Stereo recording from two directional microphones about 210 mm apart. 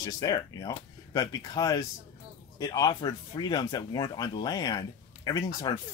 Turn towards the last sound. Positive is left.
turn(degrees=20)  # may be behind; listen again after turning